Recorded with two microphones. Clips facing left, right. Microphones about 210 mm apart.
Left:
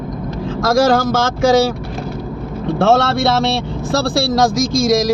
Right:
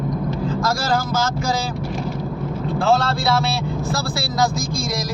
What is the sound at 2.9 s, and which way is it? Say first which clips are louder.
Speech: left 4 dB; 75° left (ahead or behind).